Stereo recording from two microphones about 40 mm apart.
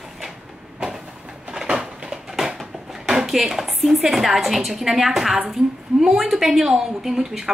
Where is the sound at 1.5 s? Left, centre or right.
Centre.